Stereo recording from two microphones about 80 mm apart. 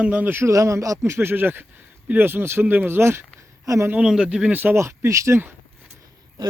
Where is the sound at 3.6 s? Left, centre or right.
Right.